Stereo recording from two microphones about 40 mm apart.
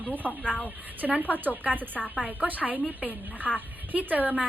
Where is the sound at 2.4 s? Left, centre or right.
Right.